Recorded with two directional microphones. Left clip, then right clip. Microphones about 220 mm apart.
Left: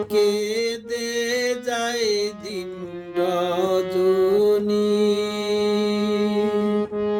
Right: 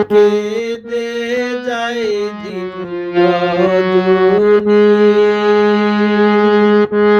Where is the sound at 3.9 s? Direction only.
45° right (ahead or behind).